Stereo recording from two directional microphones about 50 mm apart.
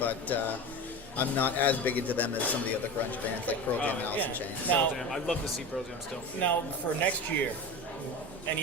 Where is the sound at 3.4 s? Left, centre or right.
Left.